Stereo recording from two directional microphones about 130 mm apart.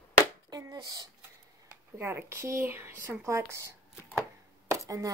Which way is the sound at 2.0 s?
15° right (ahead or behind).